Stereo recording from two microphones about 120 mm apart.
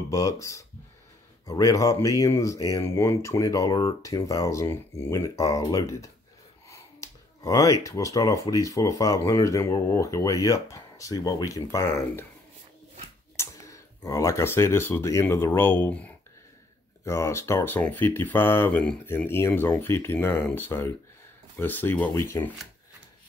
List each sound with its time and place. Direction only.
0.1 s speech: 25° left (ahead or behind)
13.4 s speech: 25° left (ahead or behind)
17.0 s speech: 25° left (ahead or behind)